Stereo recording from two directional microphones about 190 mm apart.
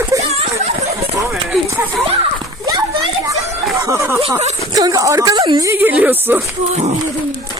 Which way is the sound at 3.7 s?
15° right (ahead or behind).